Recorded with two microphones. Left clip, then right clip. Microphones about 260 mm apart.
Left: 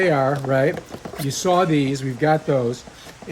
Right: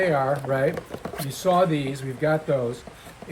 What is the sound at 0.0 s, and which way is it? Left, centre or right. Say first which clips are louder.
Speech: left 3 dB; left.